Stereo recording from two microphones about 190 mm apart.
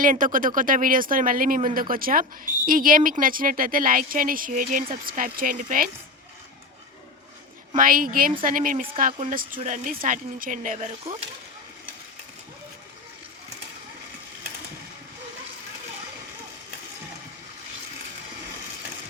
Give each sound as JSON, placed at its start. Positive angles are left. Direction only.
{"t": 0.0, "sound": "speech", "side_deg": -45}
{"t": 7.8, "sound": "speech", "side_deg": -50}